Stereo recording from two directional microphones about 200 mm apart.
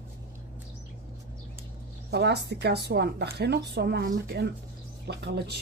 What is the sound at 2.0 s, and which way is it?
A woman's voice, 55° right (ahead or behind).